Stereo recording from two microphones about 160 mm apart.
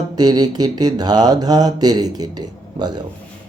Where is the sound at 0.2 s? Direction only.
25° right (ahead or behind).